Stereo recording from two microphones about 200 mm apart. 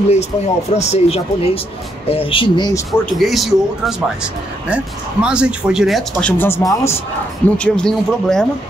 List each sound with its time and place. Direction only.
0.1 s speech: 35° left (ahead or behind)
3.2 s speech: centre (ahead or behind)